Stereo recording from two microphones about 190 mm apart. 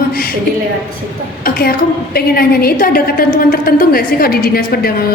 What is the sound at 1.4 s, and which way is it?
A woman's voice, 50° left (ahead or behind).